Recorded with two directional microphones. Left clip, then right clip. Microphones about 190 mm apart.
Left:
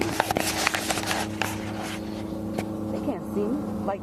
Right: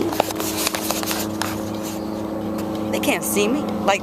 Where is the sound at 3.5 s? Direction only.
30° right (ahead or behind).